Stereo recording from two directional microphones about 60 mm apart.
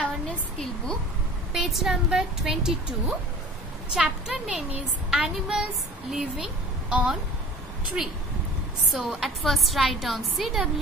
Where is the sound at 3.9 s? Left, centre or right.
Centre.